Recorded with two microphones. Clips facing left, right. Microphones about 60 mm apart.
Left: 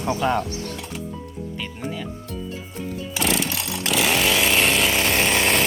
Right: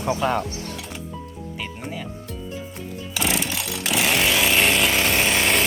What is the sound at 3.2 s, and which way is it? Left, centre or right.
Music, centre.